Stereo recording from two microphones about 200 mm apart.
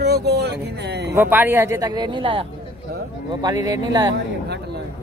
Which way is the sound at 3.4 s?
20° right (ahead or behind).